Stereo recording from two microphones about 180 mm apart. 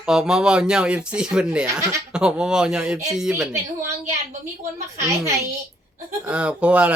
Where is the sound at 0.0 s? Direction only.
5° right (ahead or behind).